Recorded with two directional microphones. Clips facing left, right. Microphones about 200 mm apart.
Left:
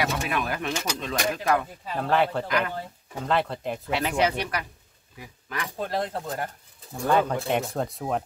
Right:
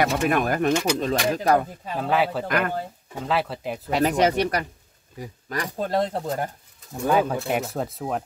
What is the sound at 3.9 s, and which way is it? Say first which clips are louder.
Speech: right 5 dB; 40° right (ahead or behind).